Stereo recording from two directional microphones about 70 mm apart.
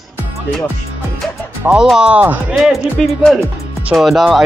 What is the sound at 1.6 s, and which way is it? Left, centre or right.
Speech, right.